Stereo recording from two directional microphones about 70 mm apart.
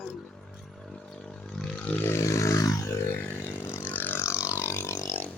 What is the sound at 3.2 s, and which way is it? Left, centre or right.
Vehicle, left.